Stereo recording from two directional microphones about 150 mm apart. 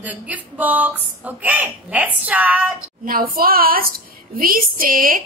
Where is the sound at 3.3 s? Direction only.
75° right (ahead or behind).